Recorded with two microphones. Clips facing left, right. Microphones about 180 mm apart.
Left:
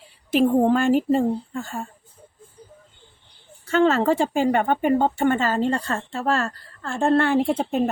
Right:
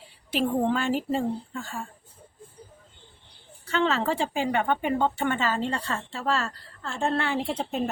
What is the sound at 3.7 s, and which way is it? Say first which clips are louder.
Speech: left 7 dB; 45° left (ahead or behind).